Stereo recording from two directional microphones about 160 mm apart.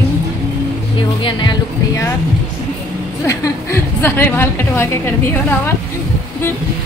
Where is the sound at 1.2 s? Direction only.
30° left (ahead or behind).